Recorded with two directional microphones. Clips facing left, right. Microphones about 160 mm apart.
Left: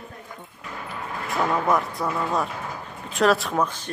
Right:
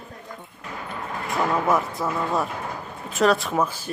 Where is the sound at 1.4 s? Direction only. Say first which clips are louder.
Even; 5° right (ahead or behind).